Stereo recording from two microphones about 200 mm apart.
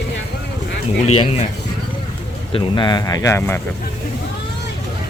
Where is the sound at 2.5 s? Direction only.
20° left (ahead or behind).